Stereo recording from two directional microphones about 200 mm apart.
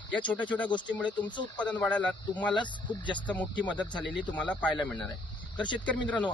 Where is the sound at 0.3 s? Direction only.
5° left (ahead or behind).